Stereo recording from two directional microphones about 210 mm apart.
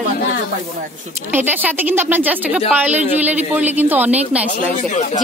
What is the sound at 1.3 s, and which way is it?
Speech, 10° right (ahead or behind).